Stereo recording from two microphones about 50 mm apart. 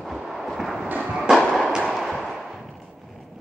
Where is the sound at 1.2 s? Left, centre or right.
Centre.